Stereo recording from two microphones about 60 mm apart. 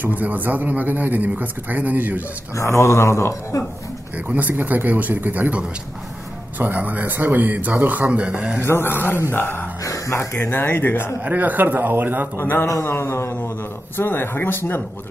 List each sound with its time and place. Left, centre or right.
0.0 s a man's voice: right
2.5 s speech: left
4.3 s a man's voice: right
6.6 s a man's voice: right
8.1 s a man's voice: centre
8.6 s speech: left
9.8 s a sound: left
10.1 s speech: left
10.5 s speech: left
11.2 s a man's voice: right
12.4 s speech: left
12.6 s speech: left